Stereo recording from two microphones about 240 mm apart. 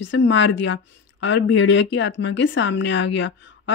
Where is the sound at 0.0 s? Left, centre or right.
Left.